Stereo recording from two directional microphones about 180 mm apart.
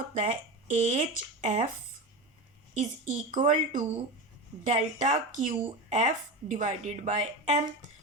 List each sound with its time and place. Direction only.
0.1 s speech: 40° right (ahead or behind)
2.7 s a woman's voice: 45° right (ahead or behind)